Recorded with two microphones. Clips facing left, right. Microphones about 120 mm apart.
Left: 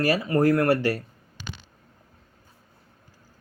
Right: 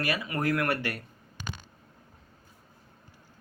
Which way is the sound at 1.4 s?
45° right (ahead or behind).